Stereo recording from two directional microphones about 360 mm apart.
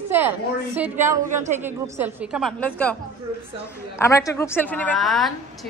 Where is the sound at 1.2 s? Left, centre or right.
Centre.